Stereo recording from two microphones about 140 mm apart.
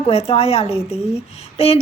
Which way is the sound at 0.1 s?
45° left (ahead or behind).